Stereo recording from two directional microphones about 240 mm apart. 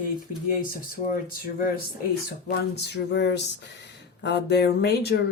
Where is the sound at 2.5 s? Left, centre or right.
Left.